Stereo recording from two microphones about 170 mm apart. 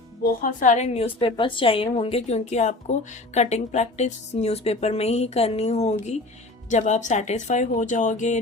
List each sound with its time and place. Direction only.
0.2 s a woman's voice: 50° left (ahead or behind)